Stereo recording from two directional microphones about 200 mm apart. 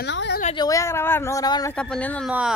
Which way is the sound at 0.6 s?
15° left (ahead or behind).